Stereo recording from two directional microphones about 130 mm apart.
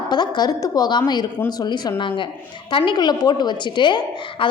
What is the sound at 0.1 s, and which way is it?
A woman's voice, 35° left (ahead or behind).